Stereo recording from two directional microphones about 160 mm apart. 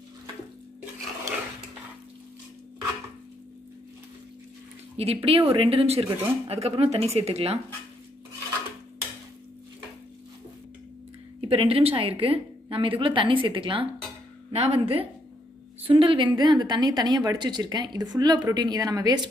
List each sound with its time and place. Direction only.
4.9 s a woman's voice: 40° right (ahead or behind)
11.4 s a woman's voice: 35° right (ahead or behind)